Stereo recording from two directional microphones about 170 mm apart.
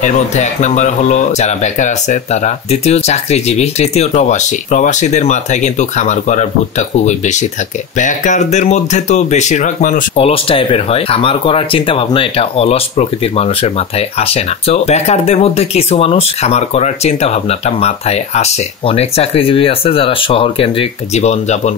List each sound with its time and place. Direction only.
0.0 s speech: 45° left (ahead or behind)
10.1 s speech: 35° left (ahead or behind)